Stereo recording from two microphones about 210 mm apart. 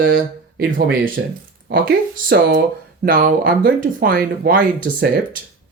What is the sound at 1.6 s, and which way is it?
Speech, 45° right (ahead or behind).